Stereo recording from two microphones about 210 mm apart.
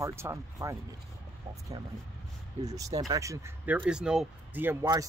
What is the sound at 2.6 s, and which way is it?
Speech, 15° right (ahead or behind).